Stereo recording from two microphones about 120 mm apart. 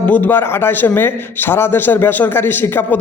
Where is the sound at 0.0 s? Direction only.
15° left (ahead or behind).